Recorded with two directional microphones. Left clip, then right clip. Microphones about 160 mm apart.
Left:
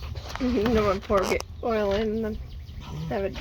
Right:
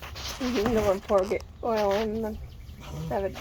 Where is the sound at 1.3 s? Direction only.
25° left (ahead or behind).